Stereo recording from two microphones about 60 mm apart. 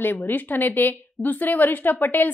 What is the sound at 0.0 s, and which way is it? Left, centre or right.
A woman's voice, left.